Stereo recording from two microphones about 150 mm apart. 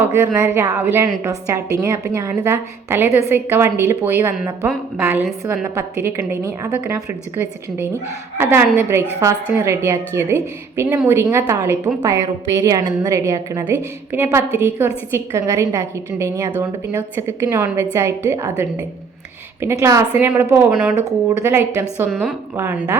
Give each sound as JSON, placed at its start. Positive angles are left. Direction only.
{"t": 0.3, "sound": "a woman's voice", "side_deg": -10}